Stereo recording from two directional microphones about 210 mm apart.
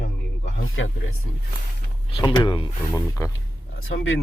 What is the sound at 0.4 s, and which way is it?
Speech, 65° left (ahead or behind).